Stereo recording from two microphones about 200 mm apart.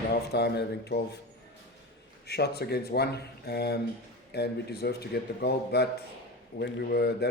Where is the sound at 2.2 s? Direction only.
55° left (ahead or behind).